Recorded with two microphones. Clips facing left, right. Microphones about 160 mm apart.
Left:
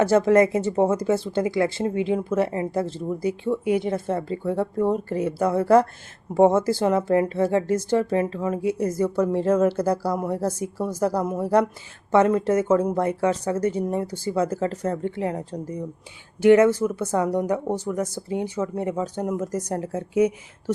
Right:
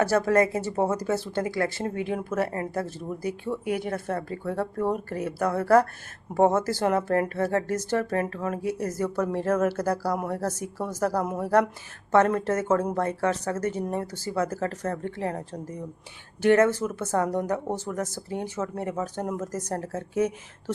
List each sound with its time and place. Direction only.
0.0 s speech: 20° left (ahead or behind)
16.4 s speech: 15° left (ahead or behind)